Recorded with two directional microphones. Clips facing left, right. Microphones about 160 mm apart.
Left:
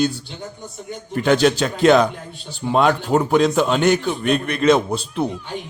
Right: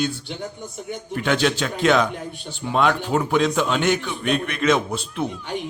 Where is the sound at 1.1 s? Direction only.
40° left (ahead or behind).